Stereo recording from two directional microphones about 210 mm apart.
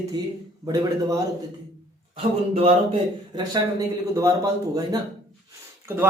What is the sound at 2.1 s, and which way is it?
A man's voice, 30° right (ahead or behind).